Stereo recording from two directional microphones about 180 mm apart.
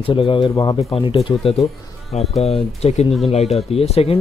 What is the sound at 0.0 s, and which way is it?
Speech, 30° left (ahead or behind).